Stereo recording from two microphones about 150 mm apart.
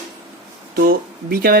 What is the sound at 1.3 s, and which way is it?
Speech, 80° right.